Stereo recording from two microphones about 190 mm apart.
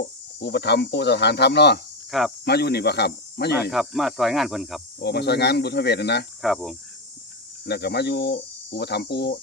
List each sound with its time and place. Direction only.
0.0 s speech: 60° left (ahead or behind)
2.0 s speech: centre (ahead or behind)
2.4 s speech: 60° left (ahead or behind)
3.7 s speech: centre (ahead or behind)
4.9 s speech: 60° left (ahead or behind)
6.4 s speech: centre (ahead or behind)
7.6 s speech: 60° left (ahead or behind)